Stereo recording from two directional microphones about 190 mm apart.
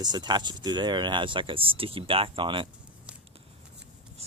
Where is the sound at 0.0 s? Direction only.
20° right (ahead or behind).